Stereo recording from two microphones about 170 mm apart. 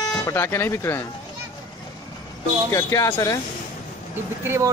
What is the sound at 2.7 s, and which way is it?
Speech, 20° left (ahead or behind).